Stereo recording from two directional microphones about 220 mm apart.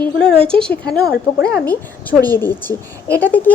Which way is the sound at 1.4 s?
45° left (ahead or behind).